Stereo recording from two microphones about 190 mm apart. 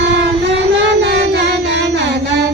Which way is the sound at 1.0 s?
60° right (ahead or behind).